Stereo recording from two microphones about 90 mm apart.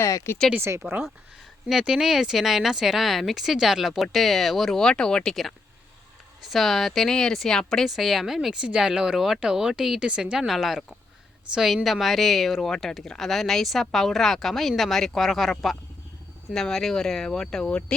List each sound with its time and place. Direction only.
0.0 s speech: 35° left (ahead or behind)
0.6 s speech: 25° right (ahead or behind)
1.6 s speech: 10° right (ahead or behind); by 17.9 s 10° left (ahead or behind)